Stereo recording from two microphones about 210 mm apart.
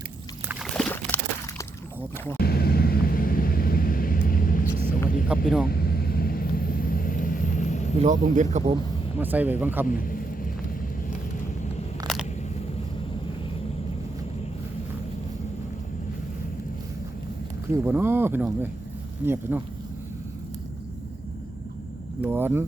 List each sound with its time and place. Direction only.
0.6 s a sound: 5° left (ahead or behind)
2.4 s vehicle: 45° left (ahead or behind)
8.0 s speech: 35° right (ahead or behind)
9.1 s speech: 10° right (ahead or behind)
9.8 s vehicle: 40° left (ahead or behind)
12.0 s a sound: centre (ahead or behind)
17.8 s speech: 10° right (ahead or behind)
22.2 s speech: 10° right (ahead or behind)